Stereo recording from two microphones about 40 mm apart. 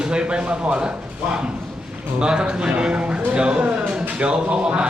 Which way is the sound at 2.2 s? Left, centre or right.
Right.